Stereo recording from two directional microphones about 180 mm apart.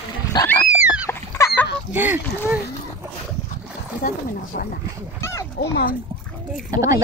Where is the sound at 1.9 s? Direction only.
10° right (ahead or behind).